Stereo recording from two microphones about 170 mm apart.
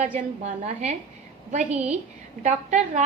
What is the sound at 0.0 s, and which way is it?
Speech, 45° right (ahead or behind).